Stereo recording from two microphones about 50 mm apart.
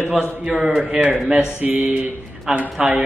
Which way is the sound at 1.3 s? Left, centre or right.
Right.